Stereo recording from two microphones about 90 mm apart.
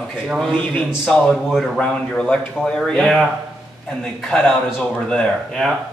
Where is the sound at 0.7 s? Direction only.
Centre (ahead or behind).